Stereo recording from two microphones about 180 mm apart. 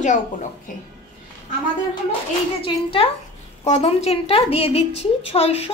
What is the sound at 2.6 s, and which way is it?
A woman's voice, 30° left (ahead or behind).